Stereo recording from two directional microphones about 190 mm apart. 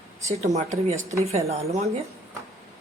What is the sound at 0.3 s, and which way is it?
A woman's voice, 35° right (ahead or behind).